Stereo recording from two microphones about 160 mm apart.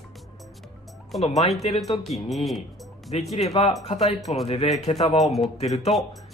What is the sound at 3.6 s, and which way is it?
Speech, 35° left (ahead or behind).